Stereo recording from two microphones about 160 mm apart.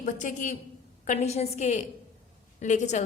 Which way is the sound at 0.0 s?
50° left (ahead or behind).